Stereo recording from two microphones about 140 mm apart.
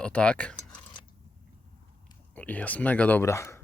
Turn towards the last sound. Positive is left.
turn(degrees=20)  # may be behind; listen again after turning